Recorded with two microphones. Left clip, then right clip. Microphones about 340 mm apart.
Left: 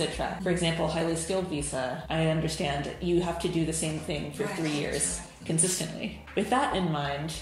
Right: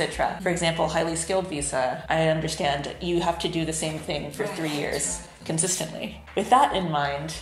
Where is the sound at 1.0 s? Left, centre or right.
Right.